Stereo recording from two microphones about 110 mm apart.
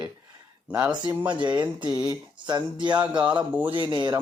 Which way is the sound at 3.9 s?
40° right (ahead or behind).